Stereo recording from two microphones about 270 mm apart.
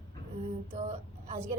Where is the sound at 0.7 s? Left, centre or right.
Right.